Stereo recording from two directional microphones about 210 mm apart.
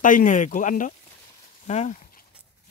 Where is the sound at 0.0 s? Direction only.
40° left (ahead or behind).